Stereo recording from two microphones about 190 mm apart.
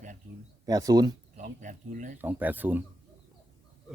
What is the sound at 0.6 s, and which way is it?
Speech, 20° right (ahead or behind).